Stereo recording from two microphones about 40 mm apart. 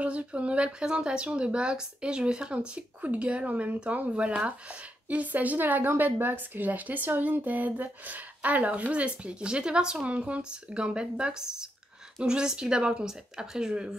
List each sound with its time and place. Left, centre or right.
0.0 s a woman's voice: right
10.0 s speech: right